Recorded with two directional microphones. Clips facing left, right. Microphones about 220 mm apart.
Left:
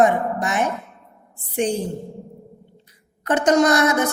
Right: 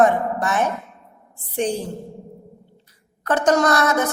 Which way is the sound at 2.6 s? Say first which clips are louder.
Left 2 dB; 20° left (ahead or behind).